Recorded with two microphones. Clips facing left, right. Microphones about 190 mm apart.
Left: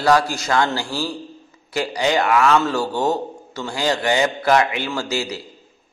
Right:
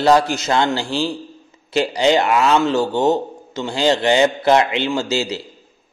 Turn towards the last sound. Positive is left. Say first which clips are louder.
# right 4 dB
turn(degrees=-25)  # may be behind; listen again after turning